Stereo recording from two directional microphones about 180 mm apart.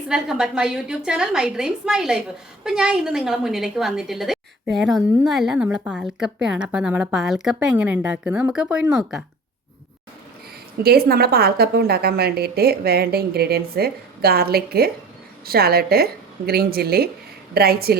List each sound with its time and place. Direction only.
0.1 s a woman's voice: 5° right (ahead or behind)
10.8 s a woman's voice: 60° right (ahead or behind)